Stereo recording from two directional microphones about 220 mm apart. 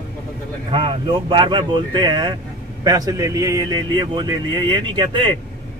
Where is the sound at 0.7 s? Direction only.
25° right (ahead or behind).